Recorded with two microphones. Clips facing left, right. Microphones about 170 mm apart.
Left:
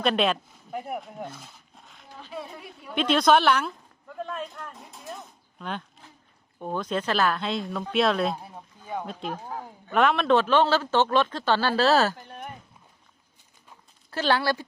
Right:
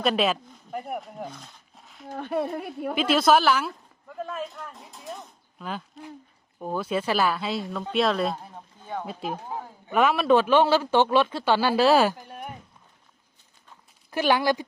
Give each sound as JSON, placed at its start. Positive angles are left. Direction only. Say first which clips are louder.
{"t": 0.0, "sound": "speech", "louder": "even", "side_deg": -5}
{"t": 2.1, "sound": "a woman's voice", "louder": "right 11 dB", "side_deg": -60}
{"t": 2.9, "sound": "speech", "louder": "even", "side_deg": -5}
{"t": 9.0, "sound": "speech", "louder": "right 1 dB", "side_deg": -5}
{"t": 14.1, "sound": "speech", "louder": "right 2 dB", "side_deg": -15}